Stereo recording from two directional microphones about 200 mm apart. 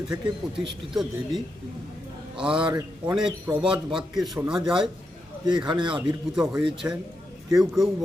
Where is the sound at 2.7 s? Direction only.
15° right (ahead or behind).